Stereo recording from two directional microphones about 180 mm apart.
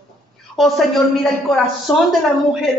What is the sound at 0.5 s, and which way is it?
A woman's voice, centre (ahead or behind).